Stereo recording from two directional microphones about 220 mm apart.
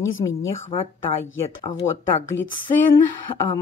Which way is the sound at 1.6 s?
20° left (ahead or behind).